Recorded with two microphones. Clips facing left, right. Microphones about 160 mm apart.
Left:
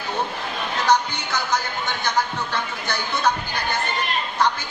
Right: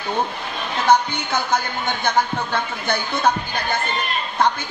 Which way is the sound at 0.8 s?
55° right (ahead or behind).